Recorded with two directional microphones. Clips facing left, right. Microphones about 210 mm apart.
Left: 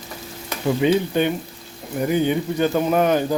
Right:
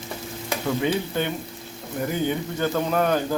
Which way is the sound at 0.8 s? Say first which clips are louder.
Left 10 dB; 15° left (ahead or behind).